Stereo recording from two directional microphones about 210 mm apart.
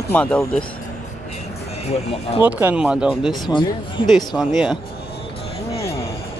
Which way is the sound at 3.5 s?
20° left (ahead or behind).